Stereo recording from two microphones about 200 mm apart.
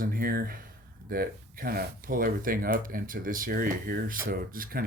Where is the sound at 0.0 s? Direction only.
45° right (ahead or behind).